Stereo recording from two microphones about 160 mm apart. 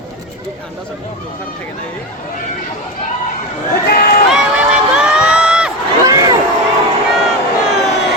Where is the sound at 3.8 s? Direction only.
75° left (ahead or behind).